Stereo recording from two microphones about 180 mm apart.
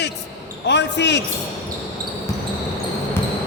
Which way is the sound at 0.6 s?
75° left (ahead or behind).